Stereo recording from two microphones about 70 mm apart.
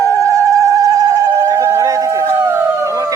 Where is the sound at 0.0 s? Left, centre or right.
Right.